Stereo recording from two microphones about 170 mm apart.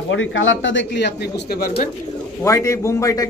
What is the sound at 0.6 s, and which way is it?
Speech, 90° left.